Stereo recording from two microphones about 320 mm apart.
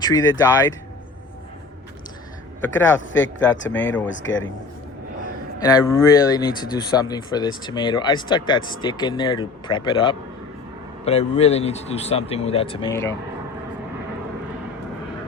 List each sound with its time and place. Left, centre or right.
0.0 s speech: centre
2.6 s speech: centre
3.1 s speech: left
3.7 s speech: centre
4.1 s speech: left
5.6 s speech: centre